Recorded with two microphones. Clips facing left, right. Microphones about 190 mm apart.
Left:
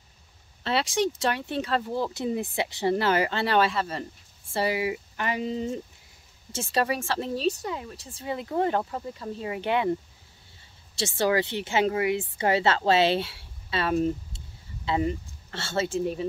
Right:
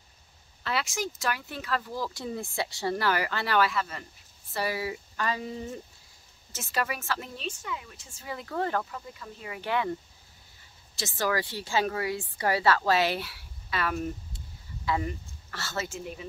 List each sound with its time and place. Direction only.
0.7 s speech: 30° left (ahead or behind)
8.9 s speech: 30° left (ahead or behind)
11.0 s speech: 30° left (ahead or behind)